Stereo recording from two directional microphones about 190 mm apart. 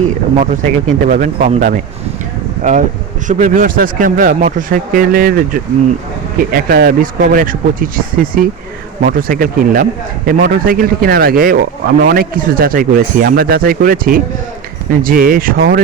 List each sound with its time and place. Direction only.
0.3 s speech: 40° right (ahead or behind)
3.2 s speech: 45° right (ahead or behind)